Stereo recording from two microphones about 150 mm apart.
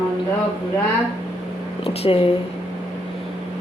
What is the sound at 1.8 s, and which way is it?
Speech, 40° left (ahead or behind).